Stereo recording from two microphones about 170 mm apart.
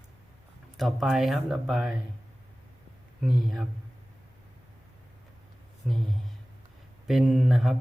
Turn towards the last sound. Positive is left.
turn(degrees=0)  # may be behind; listen again after turning